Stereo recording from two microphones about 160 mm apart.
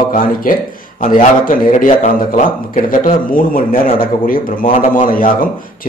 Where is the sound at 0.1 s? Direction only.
60° left (ahead or behind).